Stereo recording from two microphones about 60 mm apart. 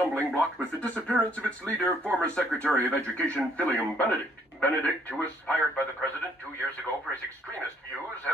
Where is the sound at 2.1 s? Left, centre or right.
Centre.